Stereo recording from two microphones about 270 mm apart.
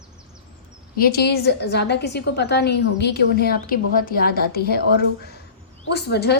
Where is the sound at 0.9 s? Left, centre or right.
Left.